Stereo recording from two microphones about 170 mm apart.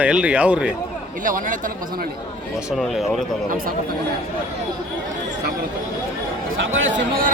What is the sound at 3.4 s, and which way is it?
Speech, 55° right (ahead or behind).